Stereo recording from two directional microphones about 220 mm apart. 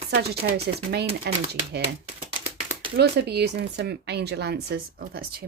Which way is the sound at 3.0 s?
50° right (ahead or behind).